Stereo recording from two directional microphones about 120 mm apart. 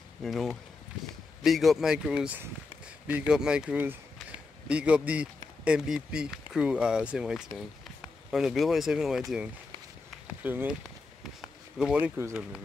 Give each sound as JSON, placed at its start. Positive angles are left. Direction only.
{"t": 0.2, "sound": "speech", "side_deg": 0}
{"t": 10.2, "sound": "a sound", "side_deg": -15}
{"t": 11.8, "sound": "speech", "side_deg": -10}